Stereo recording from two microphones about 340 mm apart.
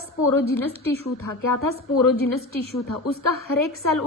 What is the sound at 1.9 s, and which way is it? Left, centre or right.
A woman's voice, left.